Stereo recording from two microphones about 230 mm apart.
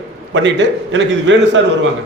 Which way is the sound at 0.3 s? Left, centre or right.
Right.